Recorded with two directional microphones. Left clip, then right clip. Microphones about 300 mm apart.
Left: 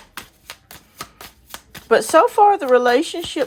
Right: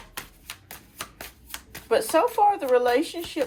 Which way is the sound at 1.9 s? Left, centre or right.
Left.